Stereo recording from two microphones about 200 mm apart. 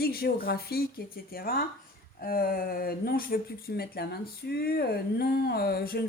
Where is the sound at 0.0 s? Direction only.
50° left (ahead or behind).